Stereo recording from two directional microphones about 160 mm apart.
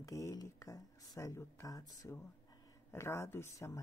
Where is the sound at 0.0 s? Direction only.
20° left (ahead or behind).